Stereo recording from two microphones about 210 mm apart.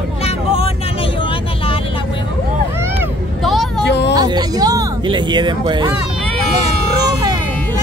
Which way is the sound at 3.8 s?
55° left (ahead or behind).